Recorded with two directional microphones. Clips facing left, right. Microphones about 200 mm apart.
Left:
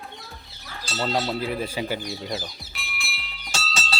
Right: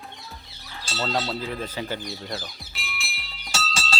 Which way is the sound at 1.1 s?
15° left (ahead or behind).